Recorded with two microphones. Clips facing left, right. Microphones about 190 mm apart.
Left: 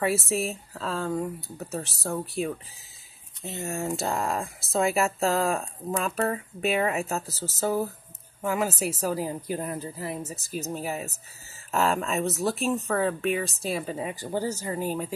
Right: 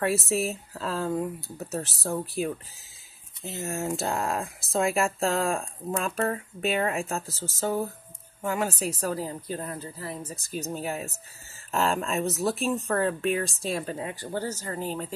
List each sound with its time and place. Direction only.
0.0 s speech: centre (ahead or behind)
10.3 s speech: centre (ahead or behind)
14.0 s speech: 15° left (ahead or behind)